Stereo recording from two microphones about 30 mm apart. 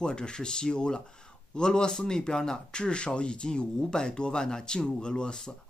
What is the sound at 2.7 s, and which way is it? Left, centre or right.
Speech, left.